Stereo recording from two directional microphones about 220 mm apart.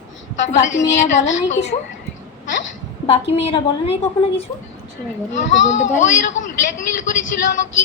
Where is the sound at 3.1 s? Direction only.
30° left (ahead or behind).